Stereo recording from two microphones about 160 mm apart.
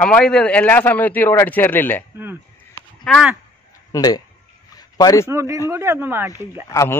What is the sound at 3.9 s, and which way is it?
A man's voice, 25° left (ahead or behind).